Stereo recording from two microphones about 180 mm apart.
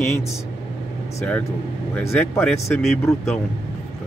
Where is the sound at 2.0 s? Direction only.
10° left (ahead or behind).